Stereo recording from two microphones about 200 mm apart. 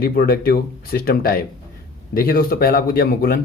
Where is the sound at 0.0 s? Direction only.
50° left (ahead or behind).